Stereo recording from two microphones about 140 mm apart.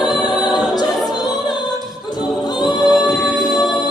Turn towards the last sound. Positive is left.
turn(degrees=0)  # may be behind; listen again after turning